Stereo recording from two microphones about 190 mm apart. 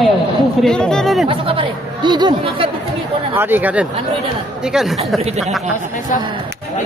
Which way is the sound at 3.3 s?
10° right (ahead or behind).